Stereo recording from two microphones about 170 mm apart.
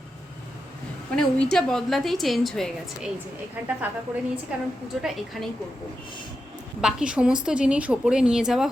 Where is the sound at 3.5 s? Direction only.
10° right (ahead or behind).